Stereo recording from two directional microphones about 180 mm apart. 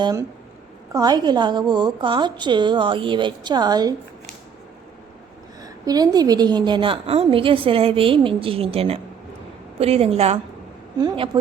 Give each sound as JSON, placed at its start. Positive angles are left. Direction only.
{"t": 0.0, "sound": "a woman's voice", "side_deg": -20}
{"t": 5.6, "sound": "a woman's voice", "side_deg": -20}